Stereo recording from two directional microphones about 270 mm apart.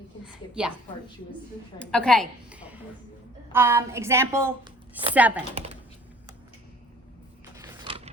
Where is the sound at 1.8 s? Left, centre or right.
Centre.